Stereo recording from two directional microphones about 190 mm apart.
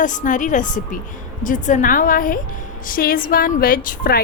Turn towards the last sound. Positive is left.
turn(degrees=50)  # may be behind; listen again after turning